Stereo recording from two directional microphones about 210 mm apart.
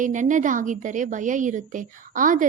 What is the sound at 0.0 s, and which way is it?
A woman's voice, 35° right (ahead or behind).